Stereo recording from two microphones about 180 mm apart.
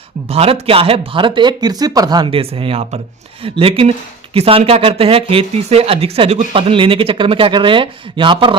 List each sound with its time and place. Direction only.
0.3 s speech: 35° right (ahead or behind)